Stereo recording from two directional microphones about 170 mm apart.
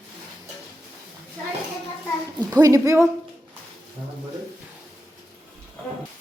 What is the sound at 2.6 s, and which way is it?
Speech, 20° right (ahead or behind).